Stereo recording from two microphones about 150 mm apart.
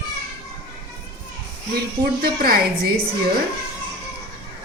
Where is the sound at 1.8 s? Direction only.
85° right.